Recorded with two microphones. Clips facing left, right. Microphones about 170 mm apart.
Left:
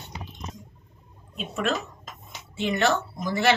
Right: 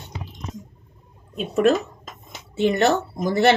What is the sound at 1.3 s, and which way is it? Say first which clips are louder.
Speech: right 9 dB; 40° right (ahead or behind).